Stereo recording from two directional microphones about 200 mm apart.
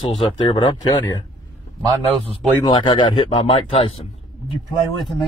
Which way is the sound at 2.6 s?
25° left (ahead or behind).